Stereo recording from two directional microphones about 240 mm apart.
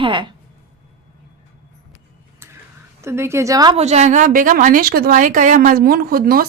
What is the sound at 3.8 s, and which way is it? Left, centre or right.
A woman's voice, right.